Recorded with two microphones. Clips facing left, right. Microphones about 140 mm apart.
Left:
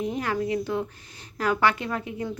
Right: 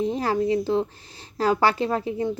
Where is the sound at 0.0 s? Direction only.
30° right (ahead or behind).